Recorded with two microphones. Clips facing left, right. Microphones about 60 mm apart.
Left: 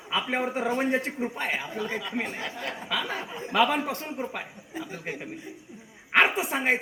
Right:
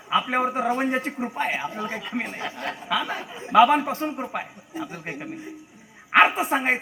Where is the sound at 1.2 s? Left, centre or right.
Centre.